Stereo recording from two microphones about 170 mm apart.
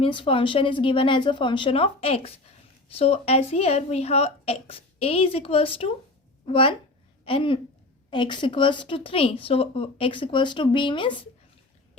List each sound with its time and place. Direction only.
0.0 s a woman's voice: 30° left (ahead or behind)